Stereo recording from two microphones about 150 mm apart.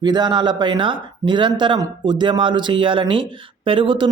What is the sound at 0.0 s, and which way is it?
Speech, 30° right (ahead or behind).